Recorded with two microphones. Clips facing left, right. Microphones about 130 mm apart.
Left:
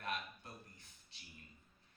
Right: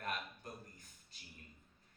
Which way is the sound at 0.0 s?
45° right (ahead or behind).